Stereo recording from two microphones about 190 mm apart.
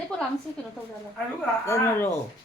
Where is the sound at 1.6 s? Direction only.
15° left (ahead or behind).